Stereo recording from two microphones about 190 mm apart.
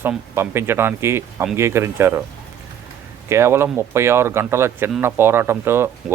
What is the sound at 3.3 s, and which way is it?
Speech, 15° right (ahead or behind).